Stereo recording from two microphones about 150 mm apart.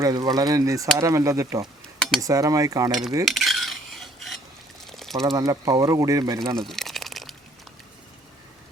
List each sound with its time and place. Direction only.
0.0 s speech: 20° right (ahead or behind)
2.0 s cutlery: 5° left (ahead or behind)
2.2 s speech: 20° right (ahead or behind)
3.2 s filing: centre (ahead or behind)
4.9 s a sound: centre (ahead or behind)
5.2 s speech: 25° right (ahead or behind)
6.6 s crumpling: centre (ahead or behind)